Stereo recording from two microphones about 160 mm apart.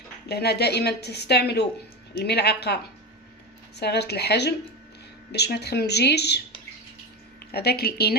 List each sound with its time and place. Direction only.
0.3 s a woman's voice: 90° left
7.5 s a woman's voice: 80° left